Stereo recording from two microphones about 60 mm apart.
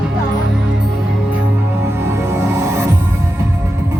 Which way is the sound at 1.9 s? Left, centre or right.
Right.